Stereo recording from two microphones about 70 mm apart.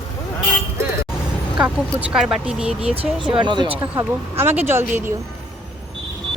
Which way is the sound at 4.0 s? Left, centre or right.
Right.